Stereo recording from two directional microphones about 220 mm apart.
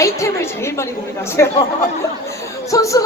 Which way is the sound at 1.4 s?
10° left (ahead or behind).